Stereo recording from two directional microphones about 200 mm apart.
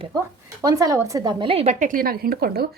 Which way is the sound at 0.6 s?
20° right (ahead or behind).